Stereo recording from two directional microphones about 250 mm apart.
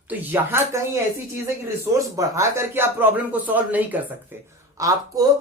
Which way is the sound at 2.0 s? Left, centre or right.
Centre.